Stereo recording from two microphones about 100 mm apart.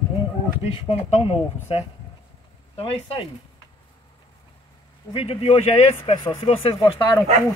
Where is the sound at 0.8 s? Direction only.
70° left (ahead or behind).